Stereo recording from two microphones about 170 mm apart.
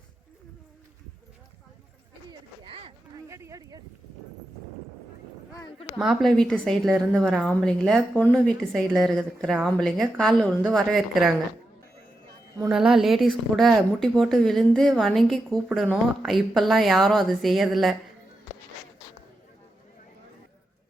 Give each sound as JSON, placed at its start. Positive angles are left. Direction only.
{"t": 2.6, "sound": "a sound", "side_deg": -30}
{"t": 3.2, "sound": "speech", "side_deg": -15}
{"t": 6.0, "sound": "a woman's voice", "side_deg": 0}
{"t": 12.7, "sound": "a woman's voice", "side_deg": -5}